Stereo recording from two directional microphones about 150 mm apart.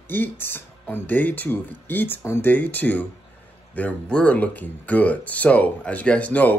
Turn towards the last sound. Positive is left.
turn(degrees=10)  # may be behind; listen again after turning